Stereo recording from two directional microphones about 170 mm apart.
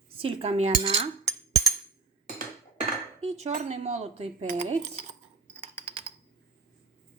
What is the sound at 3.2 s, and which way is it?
Cutlery, 40° right (ahead or behind).